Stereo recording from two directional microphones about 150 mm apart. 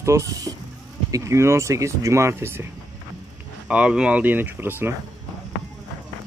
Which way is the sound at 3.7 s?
5° right (ahead or behind).